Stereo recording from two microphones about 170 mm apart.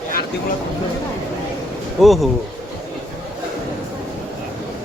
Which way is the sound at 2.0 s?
Centre (ahead or behind).